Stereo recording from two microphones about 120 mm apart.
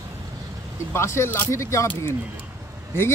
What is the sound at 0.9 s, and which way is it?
Speech, 20° left (ahead or behind).